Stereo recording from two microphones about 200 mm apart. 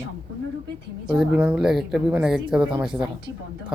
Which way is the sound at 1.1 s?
5° right (ahead or behind).